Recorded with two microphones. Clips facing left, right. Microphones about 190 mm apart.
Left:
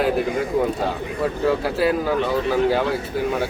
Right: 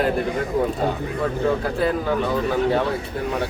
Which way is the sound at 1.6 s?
5° left (ahead or behind).